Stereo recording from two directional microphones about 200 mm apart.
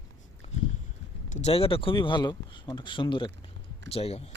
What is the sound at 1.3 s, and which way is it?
Speech, 35° left (ahead or behind).